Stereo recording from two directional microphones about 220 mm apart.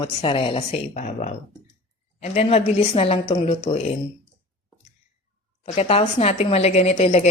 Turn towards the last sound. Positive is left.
turn(degrees=30)  # may be behind; listen again after turning